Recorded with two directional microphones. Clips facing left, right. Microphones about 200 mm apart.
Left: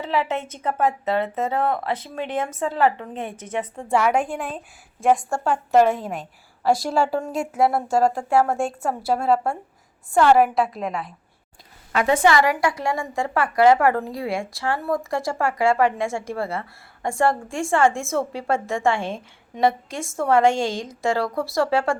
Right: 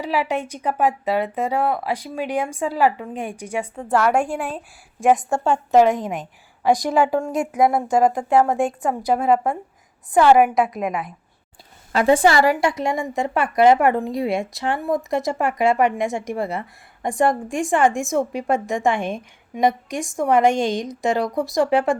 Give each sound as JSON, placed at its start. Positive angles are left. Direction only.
{"t": 0.0, "sound": "speech", "side_deg": -15}
{"t": 4.2, "sound": "speech", "side_deg": -10}
{"t": 5.1, "sound": "a woman's voice", "side_deg": -20}
{"t": 7.3, "sound": "speech", "side_deg": 0}
{"t": 7.6, "sound": "speech", "side_deg": -15}
{"t": 11.9, "sound": "a woman's voice", "side_deg": -30}